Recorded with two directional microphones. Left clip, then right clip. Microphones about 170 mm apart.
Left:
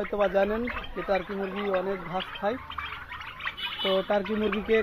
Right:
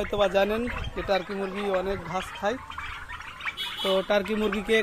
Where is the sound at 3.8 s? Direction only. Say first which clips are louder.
Right 2 dB; 15° right (ahead or behind).